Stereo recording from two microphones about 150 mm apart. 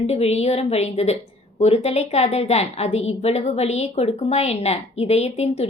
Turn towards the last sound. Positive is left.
turn(degrees=45)  # may be behind; listen again after turning